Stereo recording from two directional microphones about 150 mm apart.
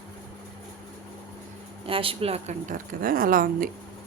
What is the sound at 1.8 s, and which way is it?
Speech, 35° right (ahead or behind).